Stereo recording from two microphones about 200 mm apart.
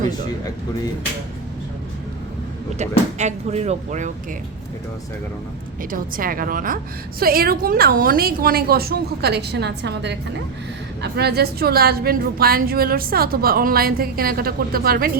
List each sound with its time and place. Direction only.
2.7 s speech: 35° right (ahead or behind)
5.9 s a woman's voice: 45° right (ahead or behind)